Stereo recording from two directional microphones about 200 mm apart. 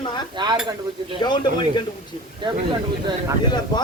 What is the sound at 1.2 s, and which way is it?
Speech, 20° left (ahead or behind).